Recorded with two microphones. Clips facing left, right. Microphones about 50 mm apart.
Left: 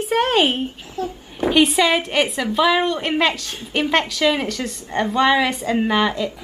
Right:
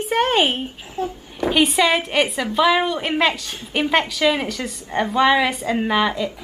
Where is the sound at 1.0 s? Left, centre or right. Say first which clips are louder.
Right 1 dB; right.